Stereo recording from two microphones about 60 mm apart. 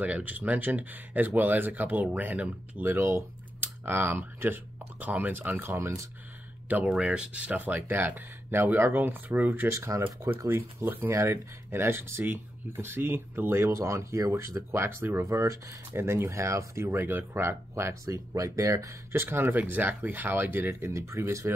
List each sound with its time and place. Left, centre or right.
0.0 s speech: right
2.8 s speech: right
3.6 s speech: right
6.8 s speech: centre; by 9.7 s right
9.7 s speech: right
10.5 s speech: right
13.7 s speech: right
19.1 s speech: right
20.8 s speech: right